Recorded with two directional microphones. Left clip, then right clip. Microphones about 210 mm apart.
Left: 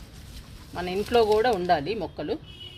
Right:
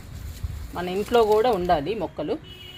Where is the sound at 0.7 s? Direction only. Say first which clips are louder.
Right 2 dB; 20° right (ahead or behind).